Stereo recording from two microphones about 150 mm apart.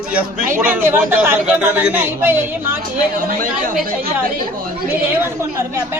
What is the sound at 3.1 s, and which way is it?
Speech, 65° right (ahead or behind).